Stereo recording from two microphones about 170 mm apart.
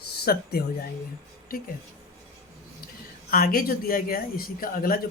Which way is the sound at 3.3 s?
60° left (ahead or behind).